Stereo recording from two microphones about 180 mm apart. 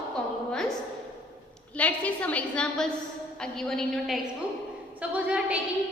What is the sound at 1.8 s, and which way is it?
A woman's voice, 10° left (ahead or behind).